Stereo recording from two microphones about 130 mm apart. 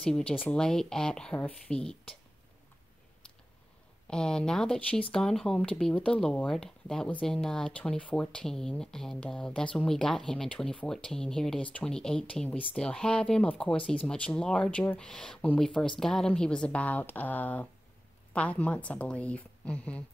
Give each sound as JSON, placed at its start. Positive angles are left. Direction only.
{"t": 0.0, "sound": "speech", "side_deg": 5}
{"t": 4.1, "sound": "a woman's voice", "side_deg": 5}